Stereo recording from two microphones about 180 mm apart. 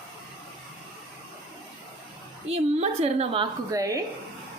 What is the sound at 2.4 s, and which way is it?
Speech, 35° right (ahead or behind).